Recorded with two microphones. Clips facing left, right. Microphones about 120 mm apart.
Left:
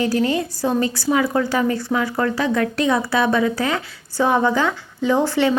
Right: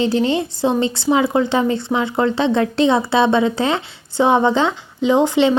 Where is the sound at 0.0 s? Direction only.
25° right (ahead or behind).